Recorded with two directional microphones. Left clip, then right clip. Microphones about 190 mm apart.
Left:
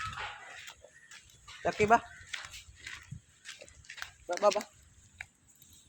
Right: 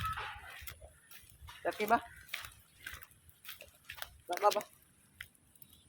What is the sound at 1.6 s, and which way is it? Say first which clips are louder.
Speech: left 6 dB; 65° left (ahead or behind).